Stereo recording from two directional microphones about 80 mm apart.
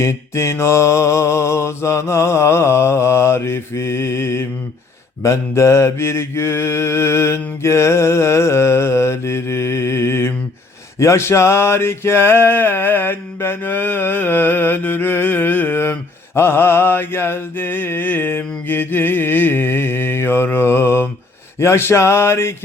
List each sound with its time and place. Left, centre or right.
0.0 s mantra: left